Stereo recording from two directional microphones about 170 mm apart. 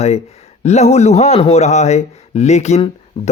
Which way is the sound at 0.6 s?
40° left (ahead or behind).